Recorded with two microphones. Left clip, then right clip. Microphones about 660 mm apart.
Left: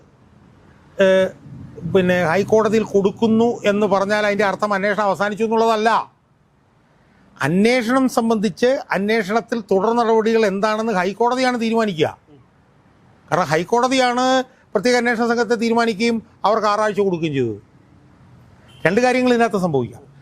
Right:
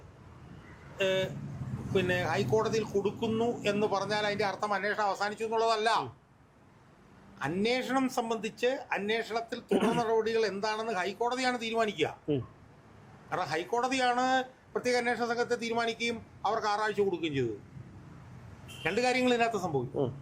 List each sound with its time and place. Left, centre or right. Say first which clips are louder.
0.9 s speech: left 15 dB; left
7.3 s speech: left 13 dB; left
13.3 s speech: left 14 dB; left
18.8 s a man's voice: left 12 dB; left